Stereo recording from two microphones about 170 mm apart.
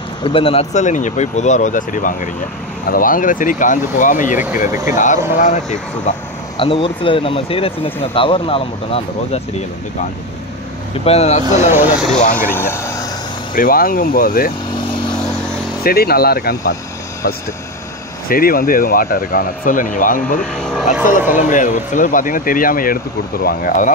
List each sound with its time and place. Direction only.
0.2 s speech: 30° left (ahead or behind)
6.5 s speech: 30° left (ahead or behind)
11.1 s speech: 40° left (ahead or behind)
12.4 s speech: 15° left (ahead or behind)
13.6 s speech: 60° left (ahead or behind)
15.8 s speech: 65° left (ahead or behind)
18.3 s speech: 60° left (ahead or behind)
20.5 s speech: centre (ahead or behind)
21.0 s speech: 50° left (ahead or behind)